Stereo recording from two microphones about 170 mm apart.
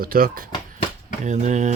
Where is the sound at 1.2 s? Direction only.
45° right (ahead or behind).